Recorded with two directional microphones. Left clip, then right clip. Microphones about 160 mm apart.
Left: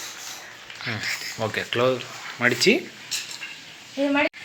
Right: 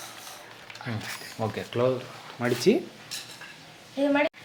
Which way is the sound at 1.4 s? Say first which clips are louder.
Left 3 dB; centre (ahead or behind).